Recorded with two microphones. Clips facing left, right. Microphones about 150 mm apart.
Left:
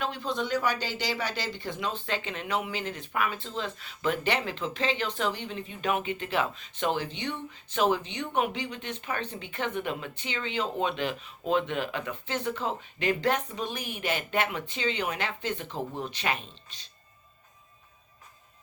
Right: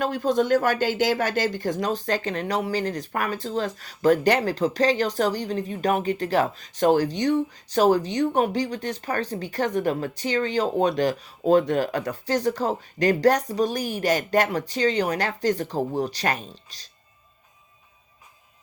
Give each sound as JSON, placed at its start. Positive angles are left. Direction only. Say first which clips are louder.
{"t": 0.0, "sound": "speech", "louder": "right 9 dB", "side_deg": -45}